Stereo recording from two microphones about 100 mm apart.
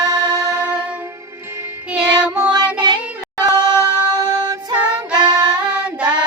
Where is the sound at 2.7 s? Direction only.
50° right (ahead or behind).